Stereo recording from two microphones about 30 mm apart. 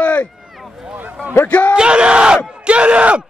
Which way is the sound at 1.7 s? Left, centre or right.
Right.